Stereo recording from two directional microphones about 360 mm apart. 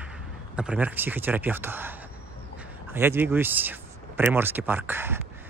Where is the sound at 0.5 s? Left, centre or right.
Centre.